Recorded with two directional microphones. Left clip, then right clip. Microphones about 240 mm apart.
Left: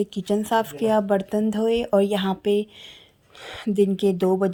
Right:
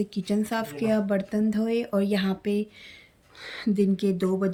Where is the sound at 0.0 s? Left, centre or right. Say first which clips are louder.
Left 5 dB; centre.